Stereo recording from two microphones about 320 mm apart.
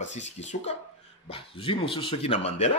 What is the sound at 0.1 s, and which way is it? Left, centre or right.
Speech, left.